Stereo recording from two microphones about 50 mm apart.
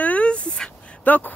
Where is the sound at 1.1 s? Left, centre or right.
Left.